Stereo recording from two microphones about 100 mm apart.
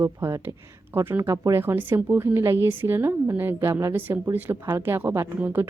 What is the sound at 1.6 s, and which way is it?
Speech, 20° right (ahead or behind).